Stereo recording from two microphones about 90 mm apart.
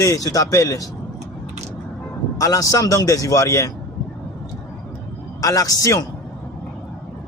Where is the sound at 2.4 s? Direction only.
40° left (ahead or behind).